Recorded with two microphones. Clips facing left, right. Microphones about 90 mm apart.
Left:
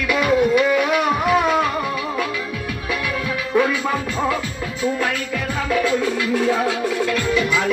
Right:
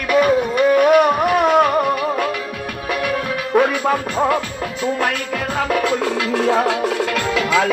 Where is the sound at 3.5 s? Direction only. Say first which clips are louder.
Right 3 dB; 55° right (ahead or behind).